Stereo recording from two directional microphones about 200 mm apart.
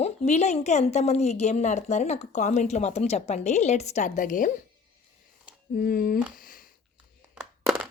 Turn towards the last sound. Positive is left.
turn(degrees=-5)  # may be behind; listen again after turning